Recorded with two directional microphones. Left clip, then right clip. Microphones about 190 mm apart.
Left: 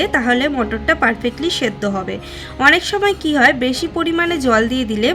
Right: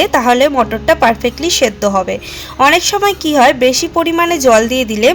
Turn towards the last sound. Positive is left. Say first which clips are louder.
# right 6 dB
turn(degrees=-15)  # may be behind; listen again after turning